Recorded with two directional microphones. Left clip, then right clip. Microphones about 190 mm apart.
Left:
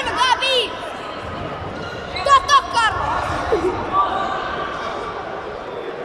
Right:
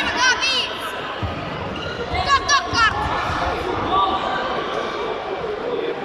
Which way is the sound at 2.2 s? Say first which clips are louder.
Left 5 dB; 40° left (ahead or behind).